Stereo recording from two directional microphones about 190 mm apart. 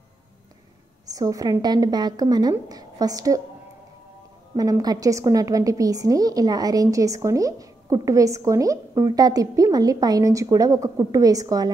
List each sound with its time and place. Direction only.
1.0 s a woman's voice: 20° right (ahead or behind)
4.6 s a woman's voice: 20° right (ahead or behind)